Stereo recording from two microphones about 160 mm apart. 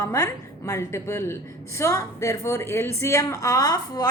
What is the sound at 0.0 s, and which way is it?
A woman's voice, 20° left (ahead or behind).